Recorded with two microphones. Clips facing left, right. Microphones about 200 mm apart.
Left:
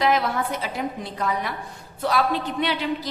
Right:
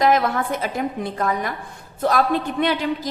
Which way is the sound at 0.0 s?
50° right (ahead or behind).